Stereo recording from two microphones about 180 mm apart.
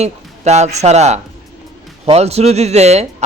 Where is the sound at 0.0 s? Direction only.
40° right (ahead or behind).